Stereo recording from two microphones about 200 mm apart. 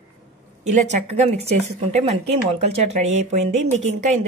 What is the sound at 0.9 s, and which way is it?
Speech, 35° right (ahead or behind).